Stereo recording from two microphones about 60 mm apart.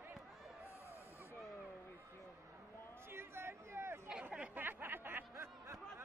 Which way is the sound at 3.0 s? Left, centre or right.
Right.